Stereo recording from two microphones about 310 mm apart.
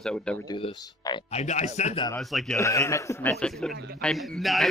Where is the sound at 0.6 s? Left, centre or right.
Centre.